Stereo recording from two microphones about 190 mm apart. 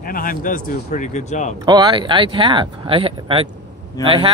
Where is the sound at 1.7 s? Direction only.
20° right (ahead or behind).